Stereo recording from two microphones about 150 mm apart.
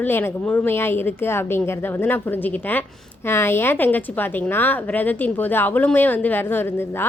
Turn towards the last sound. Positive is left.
turn(degrees=15)  # may be behind; listen again after turning